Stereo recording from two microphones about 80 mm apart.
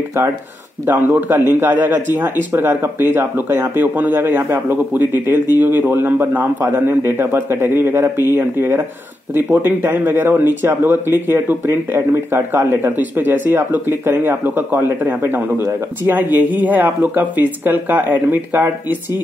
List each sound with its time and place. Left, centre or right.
0.8 s a man's voice: right